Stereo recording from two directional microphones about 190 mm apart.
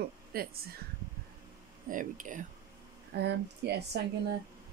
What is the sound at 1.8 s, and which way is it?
Speech, 45° right (ahead or behind).